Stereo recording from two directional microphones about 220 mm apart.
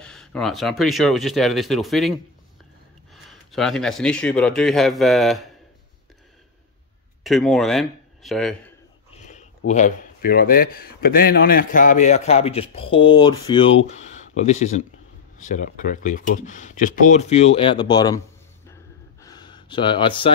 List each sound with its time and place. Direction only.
0.0 s speech: 5° left (ahead or behind)
3.3 s speech: centre (ahead or behind)
7.2 s speech: centre (ahead or behind)
9.1 s a sound: 30° left (ahead or behind)
9.7 s a man's voice: 35° left (ahead or behind); by 18.2 s 20° left (ahead or behind)
19.2 s a sound: 20° left (ahead or behind)